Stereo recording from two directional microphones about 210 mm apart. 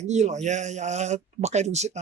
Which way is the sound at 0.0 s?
35° right (ahead or behind).